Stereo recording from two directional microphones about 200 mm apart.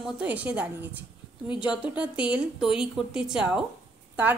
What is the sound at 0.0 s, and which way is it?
A woman's voice, 5° right (ahead or behind).